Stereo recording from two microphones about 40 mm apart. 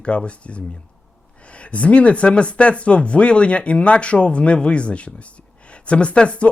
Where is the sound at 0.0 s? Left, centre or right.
Left.